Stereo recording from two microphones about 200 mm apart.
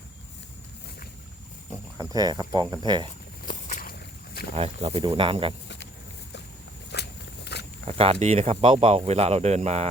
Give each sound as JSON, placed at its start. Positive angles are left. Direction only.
{"t": 2.0, "sound": "speech", "side_deg": -20}
{"t": 3.4, "sound": "a sound", "side_deg": 40}
{"t": 4.5, "sound": "speech", "side_deg": -30}
{"t": 5.6, "sound": "a sound", "side_deg": 60}
{"t": 6.9, "sound": "walk", "side_deg": 55}
{"t": 7.9, "sound": "speech", "side_deg": -30}